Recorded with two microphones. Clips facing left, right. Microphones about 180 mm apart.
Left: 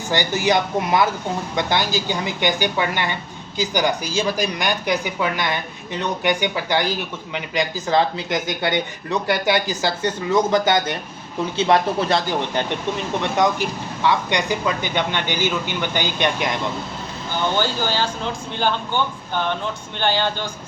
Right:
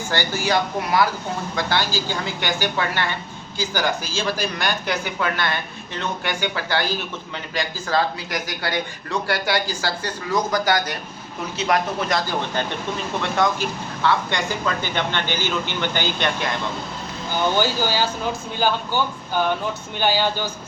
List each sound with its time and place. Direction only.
0.1 s speech: 20° left (ahead or behind)
13.2 s speech: 15° left (ahead or behind)
17.6 s speech: 10° right (ahead or behind)
20.0 s speech: 10° right (ahead or behind)